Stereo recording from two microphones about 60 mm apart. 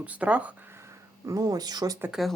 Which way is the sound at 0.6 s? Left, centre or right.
Right.